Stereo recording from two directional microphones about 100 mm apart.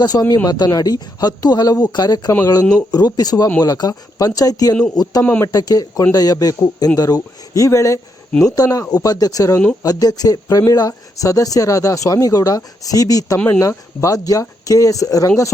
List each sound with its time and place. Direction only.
0.0 s speech: 40° left (ahead or behind)
5.2 s speech: 15° left (ahead or behind)
5.5 s speech: 40° left (ahead or behind)